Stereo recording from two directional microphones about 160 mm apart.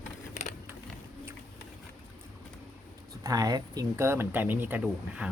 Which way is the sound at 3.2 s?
25° right (ahead or behind).